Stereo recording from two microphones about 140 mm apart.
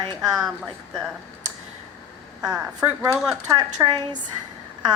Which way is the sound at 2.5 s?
10° right (ahead or behind).